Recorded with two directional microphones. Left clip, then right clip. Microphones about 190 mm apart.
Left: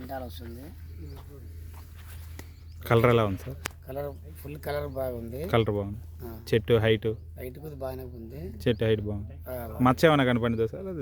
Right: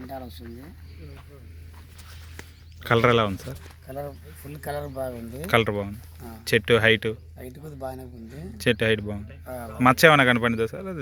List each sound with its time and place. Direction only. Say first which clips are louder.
0.1 s speech: left 2 dB; 5° right (ahead or behind)
2.8 s speech: right 3 dB; 10° left (ahead or behind)
3.8 s speech: right 3 dB; 20° left (ahead or behind)
5.4 s speech: right 4 dB; 15° left (ahead or behind)
7.3 s speech: left 1 dB; 35° left (ahead or behind)
8.3 s speech: right 5 dB; 15° left (ahead or behind)